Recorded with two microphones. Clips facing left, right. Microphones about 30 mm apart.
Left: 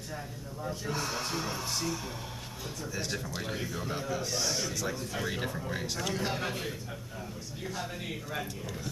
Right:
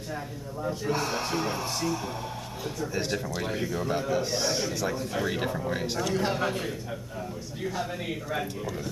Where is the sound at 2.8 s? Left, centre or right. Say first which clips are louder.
Right 5 dB; right.